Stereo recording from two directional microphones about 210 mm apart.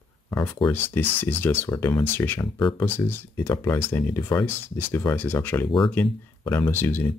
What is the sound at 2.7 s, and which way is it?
Speech, 10° left (ahead or behind).